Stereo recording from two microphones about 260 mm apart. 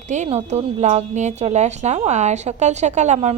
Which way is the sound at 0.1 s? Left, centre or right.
Right.